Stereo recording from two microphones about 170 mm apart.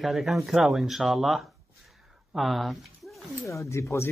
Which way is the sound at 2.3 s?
Centre (ahead or behind).